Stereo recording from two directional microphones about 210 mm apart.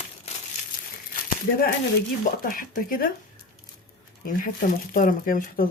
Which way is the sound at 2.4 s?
40° left (ahead or behind).